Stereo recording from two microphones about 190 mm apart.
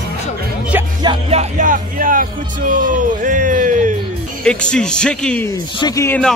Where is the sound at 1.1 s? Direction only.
35° right (ahead or behind).